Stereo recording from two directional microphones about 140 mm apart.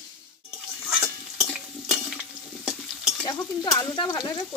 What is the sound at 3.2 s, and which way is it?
Speech, 30° left (ahead or behind).